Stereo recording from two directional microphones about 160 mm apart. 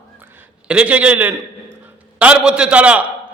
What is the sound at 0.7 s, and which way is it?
A man's voice, 5° right (ahead or behind).